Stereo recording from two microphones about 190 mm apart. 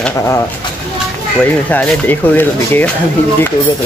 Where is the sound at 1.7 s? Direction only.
10° left (ahead or behind).